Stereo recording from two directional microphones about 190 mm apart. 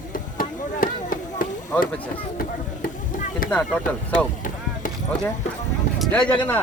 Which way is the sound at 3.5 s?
5° left (ahead or behind).